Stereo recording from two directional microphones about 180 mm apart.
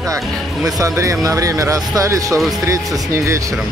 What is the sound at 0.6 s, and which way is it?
Speech, 20° right (ahead or behind).